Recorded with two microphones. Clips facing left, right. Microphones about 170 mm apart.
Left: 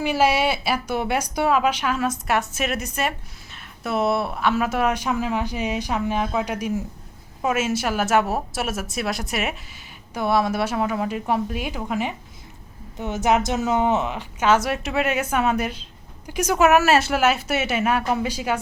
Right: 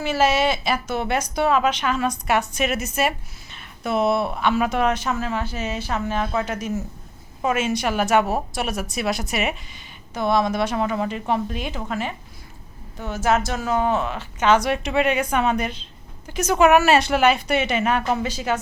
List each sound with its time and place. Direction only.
0.0 s a woman's voice: 10° left (ahead or behind)